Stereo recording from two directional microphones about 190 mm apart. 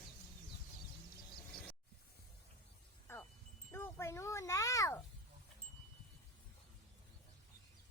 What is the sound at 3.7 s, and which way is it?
Wind chime, 10° left (ahead or behind).